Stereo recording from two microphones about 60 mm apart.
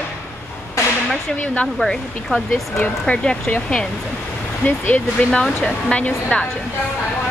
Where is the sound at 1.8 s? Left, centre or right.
Centre.